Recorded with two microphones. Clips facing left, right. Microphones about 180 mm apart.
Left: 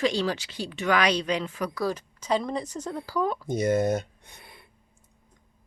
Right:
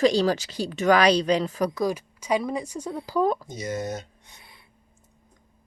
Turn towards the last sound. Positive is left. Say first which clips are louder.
# left 2 dB
turn(degrees=55)  # may be behind; listen again after turning